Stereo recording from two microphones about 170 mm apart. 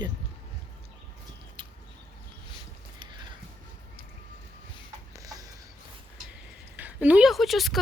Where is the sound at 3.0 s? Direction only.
25° right (ahead or behind).